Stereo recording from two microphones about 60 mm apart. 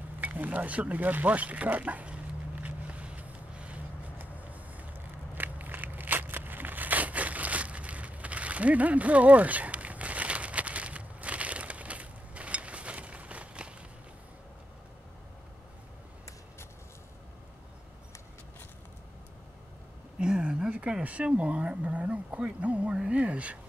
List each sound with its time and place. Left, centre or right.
0.2 s speech: right
2.6 s vehicle: right
4.5 s crushing: right
20.2 s a sound: centre
21.0 s speech: right